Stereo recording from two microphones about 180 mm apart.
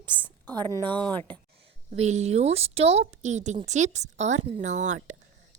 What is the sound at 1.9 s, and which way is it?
A woman's voice, 40° right (ahead or behind).